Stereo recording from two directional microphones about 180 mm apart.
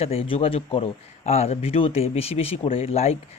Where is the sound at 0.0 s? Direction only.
30° left (ahead or behind).